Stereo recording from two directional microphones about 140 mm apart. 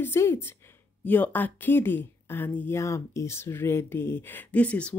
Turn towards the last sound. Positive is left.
turn(degrees=10)  # may be behind; listen again after turning